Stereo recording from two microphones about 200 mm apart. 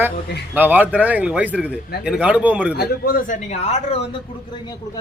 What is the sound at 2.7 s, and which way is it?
Speech, 50° left (ahead or behind).